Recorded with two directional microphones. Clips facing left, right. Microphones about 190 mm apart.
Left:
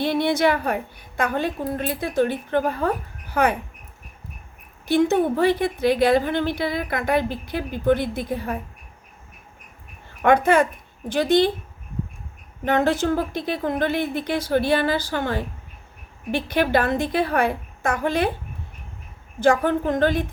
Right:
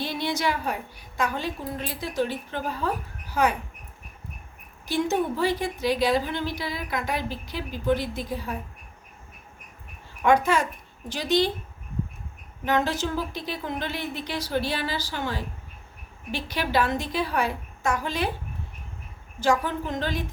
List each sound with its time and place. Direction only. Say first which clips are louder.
0.0 s a woman's voice: left 8 dB; 55° left (ahead or behind)
4.9 s a woman's voice: left 6 dB; 55° left (ahead or behind)
10.2 s a woman's voice: left 4 dB; 55° left (ahead or behind)
12.6 s a woman's voice: left 5 dB; 55° left (ahead or behind)
19.4 s a woman's voice: left 6 dB; 55° left (ahead or behind)